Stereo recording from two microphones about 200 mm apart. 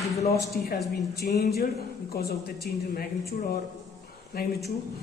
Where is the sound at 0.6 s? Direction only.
50° left (ahead or behind).